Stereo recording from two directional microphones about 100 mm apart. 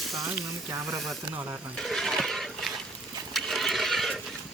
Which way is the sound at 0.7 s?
30° right (ahead or behind).